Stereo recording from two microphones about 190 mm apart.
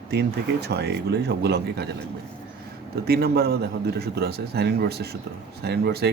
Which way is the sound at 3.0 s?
55° right (ahead or behind).